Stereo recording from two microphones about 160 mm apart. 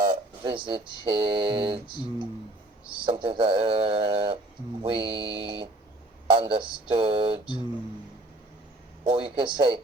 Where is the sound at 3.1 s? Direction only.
30° right (ahead or behind).